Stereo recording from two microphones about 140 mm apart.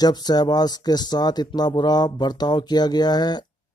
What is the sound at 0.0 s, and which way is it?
Speech, 30° left (ahead or behind).